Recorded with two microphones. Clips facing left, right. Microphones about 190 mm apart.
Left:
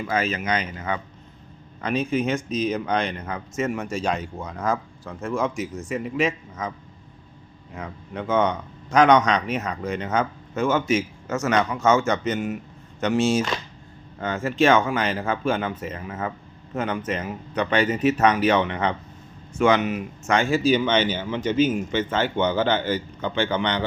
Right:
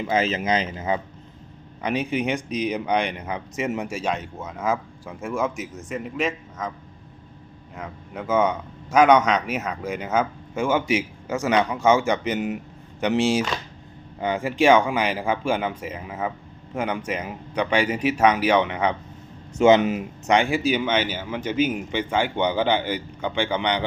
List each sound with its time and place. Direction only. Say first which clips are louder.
0.0 s speech: right 2 dB; 20° right (ahead or behind); by 6.7 s centre (ahead or behind)
7.8 s speech: left 2 dB; 5° right (ahead or behind)
19.5 s speech: right 4 dB; 25° right (ahead or behind)